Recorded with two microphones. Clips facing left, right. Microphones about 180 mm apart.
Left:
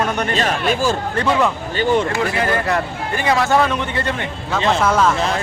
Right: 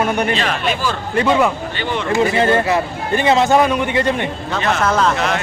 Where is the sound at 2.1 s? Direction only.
25° right (ahead or behind).